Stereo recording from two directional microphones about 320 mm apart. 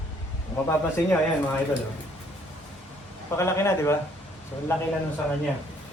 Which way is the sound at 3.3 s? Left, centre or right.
Centre.